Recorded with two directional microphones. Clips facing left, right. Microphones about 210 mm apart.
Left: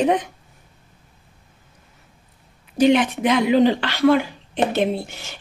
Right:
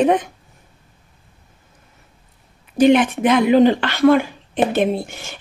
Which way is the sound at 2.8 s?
50° right (ahead or behind).